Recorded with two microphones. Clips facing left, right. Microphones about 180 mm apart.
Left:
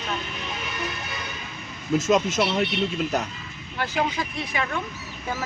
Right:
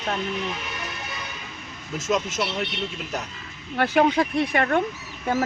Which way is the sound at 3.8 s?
60° right (ahead or behind).